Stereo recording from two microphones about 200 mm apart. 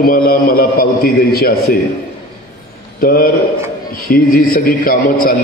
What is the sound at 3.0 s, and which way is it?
A man's voice, 50° left (ahead or behind).